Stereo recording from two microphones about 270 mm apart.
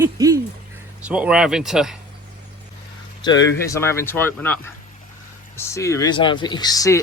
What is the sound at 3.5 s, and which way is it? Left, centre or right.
Speech, centre.